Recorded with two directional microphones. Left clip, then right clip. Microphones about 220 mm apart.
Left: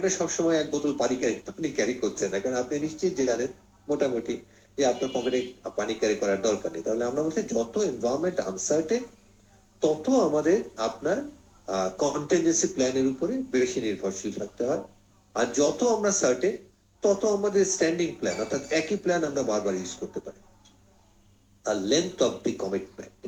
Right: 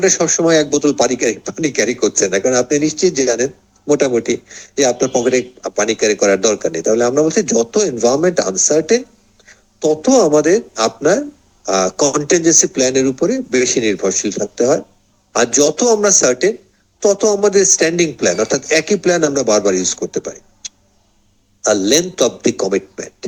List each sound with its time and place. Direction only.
0.0 s a man's voice: 50° right (ahead or behind)